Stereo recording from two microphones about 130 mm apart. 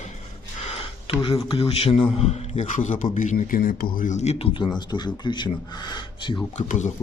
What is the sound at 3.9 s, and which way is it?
A man's voice, 75° left (ahead or behind).